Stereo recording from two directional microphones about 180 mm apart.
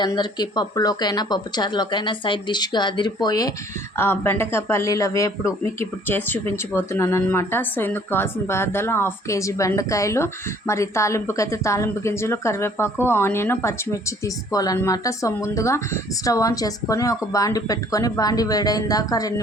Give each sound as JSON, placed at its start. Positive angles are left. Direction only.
{"t": 0.0, "sound": "speech", "side_deg": 25}